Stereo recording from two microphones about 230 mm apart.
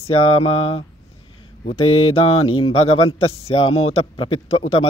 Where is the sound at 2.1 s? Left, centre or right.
Left.